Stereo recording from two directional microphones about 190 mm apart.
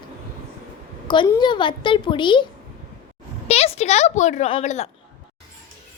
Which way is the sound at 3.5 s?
35° left (ahead or behind).